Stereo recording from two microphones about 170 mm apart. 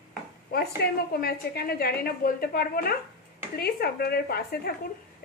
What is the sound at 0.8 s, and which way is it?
Speech, 75° left (ahead or behind).